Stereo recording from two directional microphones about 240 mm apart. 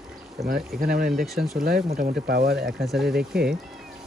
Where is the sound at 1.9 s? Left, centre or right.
Right.